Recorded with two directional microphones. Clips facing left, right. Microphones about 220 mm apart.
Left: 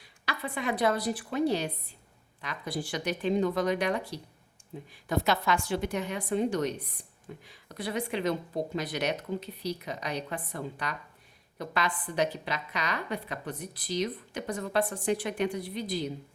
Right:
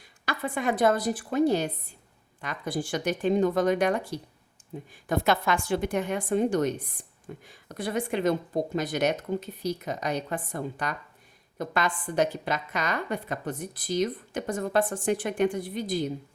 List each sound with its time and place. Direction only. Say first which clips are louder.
0.0 s a woman's voice: right 4 dB; 50° right (ahead or behind)